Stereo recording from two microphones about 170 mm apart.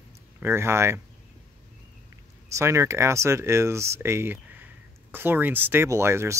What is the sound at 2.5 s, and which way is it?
Speech, 15° right (ahead or behind).